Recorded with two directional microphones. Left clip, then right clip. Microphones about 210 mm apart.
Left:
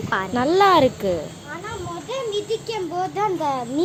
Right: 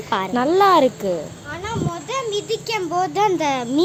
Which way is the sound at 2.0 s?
25° right (ahead or behind).